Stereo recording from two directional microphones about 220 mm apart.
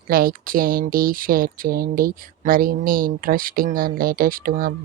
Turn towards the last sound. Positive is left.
turn(degrees=-40)  # may be behind; listen again after turning